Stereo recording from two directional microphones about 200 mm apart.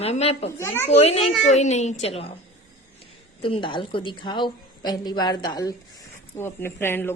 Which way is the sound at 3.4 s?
25° left (ahead or behind).